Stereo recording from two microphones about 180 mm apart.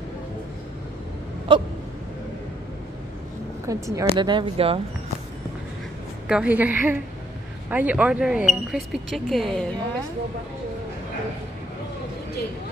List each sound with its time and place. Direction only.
1.5 s speech: 30° right (ahead or behind)
3.6 s a woman's voice: 15° right (ahead or behind)
6.2 s a woman's voice: 5° right (ahead or behind)